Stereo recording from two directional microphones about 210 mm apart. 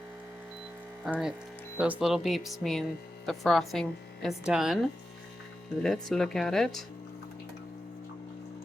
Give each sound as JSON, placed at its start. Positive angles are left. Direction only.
{"t": 1.0, "sound": "a woman's voice", "side_deg": -5}
{"t": 5.8, "sound": "a woman's voice", "side_deg": 0}